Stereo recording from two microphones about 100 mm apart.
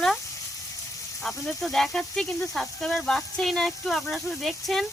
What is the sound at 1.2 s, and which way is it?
Speech, 5° left (ahead or behind).